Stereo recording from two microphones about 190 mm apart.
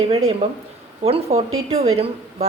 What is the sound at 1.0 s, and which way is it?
A woman's voice, 35° right (ahead or behind).